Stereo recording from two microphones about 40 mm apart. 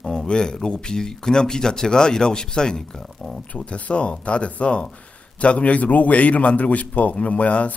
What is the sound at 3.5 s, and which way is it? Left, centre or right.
A man's voice, left.